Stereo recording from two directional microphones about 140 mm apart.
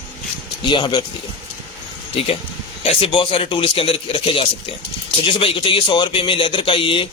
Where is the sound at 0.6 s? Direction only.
35° left (ahead or behind).